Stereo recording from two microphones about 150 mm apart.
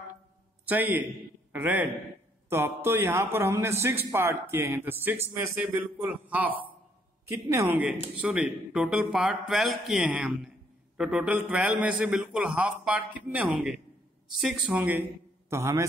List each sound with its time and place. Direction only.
0.7 s a man's voice: 10° right (ahead or behind)